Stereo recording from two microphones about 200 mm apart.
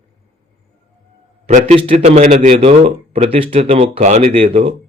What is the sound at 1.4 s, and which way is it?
Speech, 30° right (ahead or behind).